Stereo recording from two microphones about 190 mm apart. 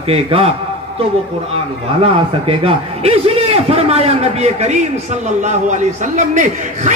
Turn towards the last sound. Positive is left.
turn(degrees=-40)  # may be behind; listen again after turning